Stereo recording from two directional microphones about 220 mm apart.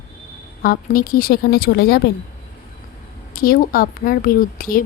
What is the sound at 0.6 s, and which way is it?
Speech, 40° left (ahead or behind).